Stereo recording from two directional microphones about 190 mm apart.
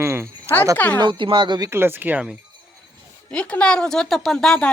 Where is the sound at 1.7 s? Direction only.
10° right (ahead or behind).